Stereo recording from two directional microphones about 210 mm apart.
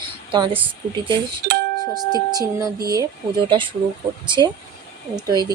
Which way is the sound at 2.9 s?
20° right (ahead or behind).